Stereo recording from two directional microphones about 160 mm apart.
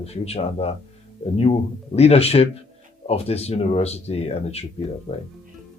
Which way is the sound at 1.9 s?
40° left (ahead or behind).